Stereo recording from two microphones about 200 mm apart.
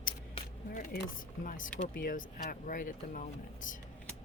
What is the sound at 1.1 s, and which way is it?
Speech, 40° left (ahead or behind).